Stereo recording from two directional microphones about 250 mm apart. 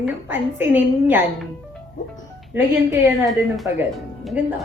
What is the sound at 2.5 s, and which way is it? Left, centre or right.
A woman's voice, centre.